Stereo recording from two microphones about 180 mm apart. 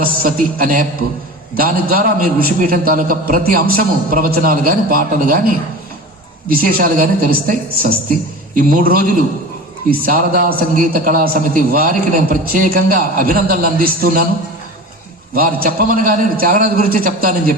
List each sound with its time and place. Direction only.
0.0 s a man's voice: 55° right (ahead or behind)
15.4 s a man's voice: 55° right (ahead or behind)